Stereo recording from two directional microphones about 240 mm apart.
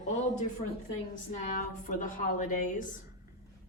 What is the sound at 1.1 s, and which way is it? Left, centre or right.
A woman's voice, left.